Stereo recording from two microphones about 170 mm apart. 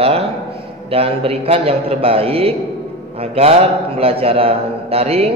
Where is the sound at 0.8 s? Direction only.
35° right (ahead or behind).